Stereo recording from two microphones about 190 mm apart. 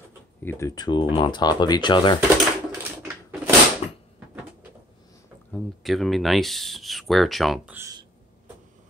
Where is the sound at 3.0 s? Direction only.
5° right (ahead or behind).